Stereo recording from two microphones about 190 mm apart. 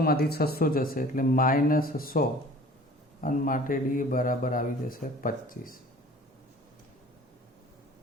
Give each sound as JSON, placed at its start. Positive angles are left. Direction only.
{"t": 0.0, "sound": "a man's voice", "side_deg": 55}